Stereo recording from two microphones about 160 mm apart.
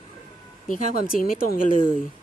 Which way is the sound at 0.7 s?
60° left (ahead or behind).